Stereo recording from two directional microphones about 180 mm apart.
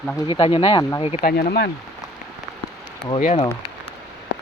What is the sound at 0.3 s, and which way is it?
Speech, 30° left (ahead or behind).